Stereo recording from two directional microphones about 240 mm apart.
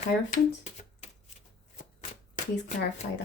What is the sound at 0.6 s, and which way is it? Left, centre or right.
Shuffling cards, left.